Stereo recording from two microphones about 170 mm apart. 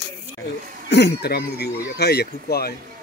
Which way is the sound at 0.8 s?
80° left.